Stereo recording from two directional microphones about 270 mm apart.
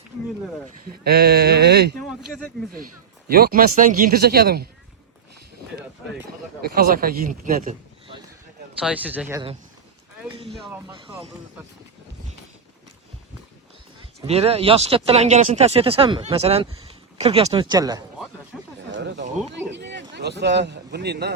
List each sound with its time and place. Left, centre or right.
1.0 s a man's voice: right
2.0 s speech: centre
3.2 s a man's voice: right
6.1 s a man's voice: right
8.8 s speech: centre
10.7 s speech: centre
14.3 s speech: right
18.9 s speech: right